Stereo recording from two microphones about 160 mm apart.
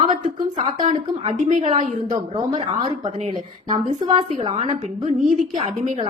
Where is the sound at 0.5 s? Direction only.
50° right (ahead or behind).